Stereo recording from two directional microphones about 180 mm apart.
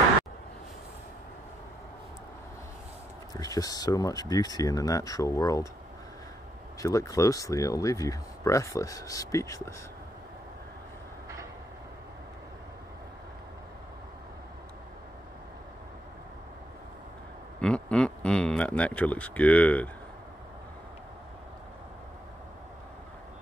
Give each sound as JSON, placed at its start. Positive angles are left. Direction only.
{"t": 3.3, "sound": "speech", "side_deg": 20}
{"t": 6.8, "sound": "speech", "side_deg": 15}
{"t": 17.6, "sound": "speech", "side_deg": 5}